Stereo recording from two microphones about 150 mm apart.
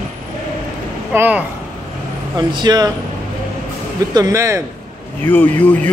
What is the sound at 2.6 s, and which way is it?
Speech, 30° right (ahead or behind).